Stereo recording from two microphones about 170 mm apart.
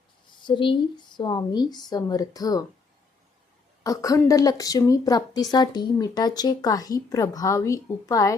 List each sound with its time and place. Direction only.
0.4 s a woman's voice: 30° left (ahead or behind)
3.8 s a woman's voice: 20° left (ahead or behind)